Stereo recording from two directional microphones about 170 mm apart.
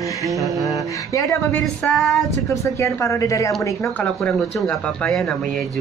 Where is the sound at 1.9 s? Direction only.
Centre (ahead or behind).